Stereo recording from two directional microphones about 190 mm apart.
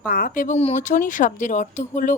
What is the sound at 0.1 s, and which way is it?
Speech, 45° left (ahead or behind).